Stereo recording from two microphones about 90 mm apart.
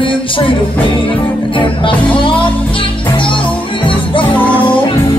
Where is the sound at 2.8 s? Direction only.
70° left (ahead or behind).